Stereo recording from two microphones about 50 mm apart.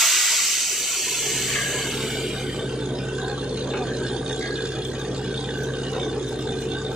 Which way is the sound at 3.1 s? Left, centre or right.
Centre.